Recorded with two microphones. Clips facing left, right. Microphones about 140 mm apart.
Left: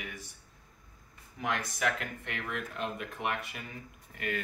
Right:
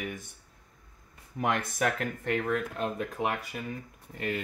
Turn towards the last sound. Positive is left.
turn(degrees=-30)  # may be behind; listen again after turning